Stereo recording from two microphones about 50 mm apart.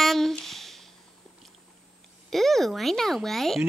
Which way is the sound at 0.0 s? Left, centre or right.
Centre.